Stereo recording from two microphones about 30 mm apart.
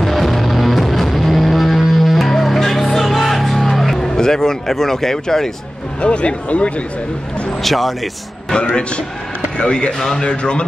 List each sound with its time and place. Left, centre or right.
0.0 s music: centre
4.1 s speech: centre
5.9 s speech: left
7.6 s speech: centre
9.6 s speech: left
9.9 s speech: centre
10.2 s speech: left